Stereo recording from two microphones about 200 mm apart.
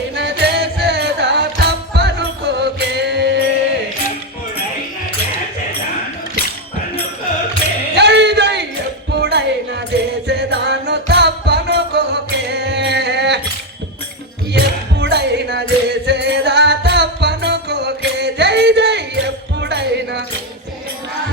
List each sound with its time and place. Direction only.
0.2 s music: 60° right (ahead or behind)
7.9 s music: 60° right (ahead or behind)
14.5 s music: 55° right (ahead or behind)